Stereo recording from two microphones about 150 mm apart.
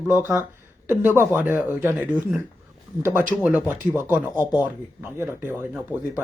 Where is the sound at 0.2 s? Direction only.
15° right (ahead or behind).